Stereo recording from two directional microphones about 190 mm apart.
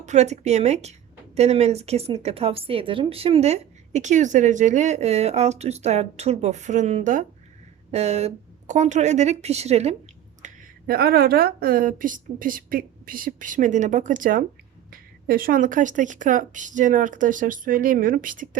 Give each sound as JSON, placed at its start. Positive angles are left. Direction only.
{"t": 0.0, "sound": "speech", "side_deg": -35}
{"t": 10.4, "sound": "speech", "side_deg": -50}